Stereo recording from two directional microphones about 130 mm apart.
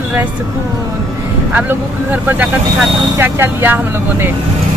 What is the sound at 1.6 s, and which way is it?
Speech, 15° right (ahead or behind).